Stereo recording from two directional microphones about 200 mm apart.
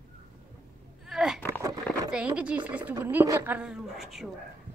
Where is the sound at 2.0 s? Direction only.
5° right (ahead or behind).